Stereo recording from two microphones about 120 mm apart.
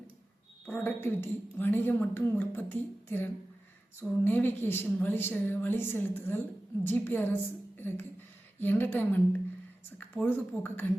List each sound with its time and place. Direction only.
0.7 s a woman's voice: 15° left (ahead or behind)